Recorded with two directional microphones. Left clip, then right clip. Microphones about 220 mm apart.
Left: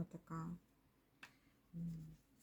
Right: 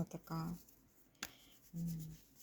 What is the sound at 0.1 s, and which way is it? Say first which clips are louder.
Speech: right 4 dB; 20° right (ahead or behind).